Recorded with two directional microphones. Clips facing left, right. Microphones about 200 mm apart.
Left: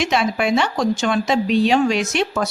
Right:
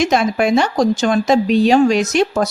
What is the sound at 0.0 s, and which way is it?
A woman's voice, 45° right (ahead or behind).